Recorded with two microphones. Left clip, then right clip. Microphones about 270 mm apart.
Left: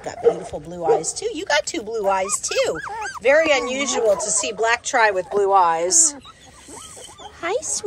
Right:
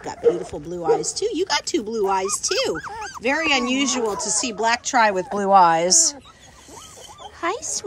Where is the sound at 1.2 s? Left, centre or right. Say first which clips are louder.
Left 1 dB; right.